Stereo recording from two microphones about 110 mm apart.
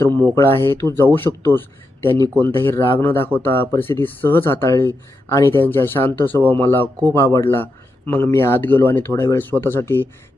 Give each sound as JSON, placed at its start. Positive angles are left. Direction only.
{"t": 0.3, "sound": "speech", "side_deg": 25}